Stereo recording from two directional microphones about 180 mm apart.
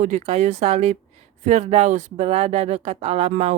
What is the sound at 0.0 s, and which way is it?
Speech, 35° right (ahead or behind).